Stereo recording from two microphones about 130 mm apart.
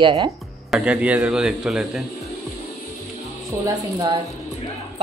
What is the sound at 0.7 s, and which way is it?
A man's voice, 10° right (ahead or behind).